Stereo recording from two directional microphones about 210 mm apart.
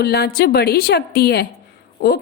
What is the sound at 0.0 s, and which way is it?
A woman's voice, 50° left (ahead or behind).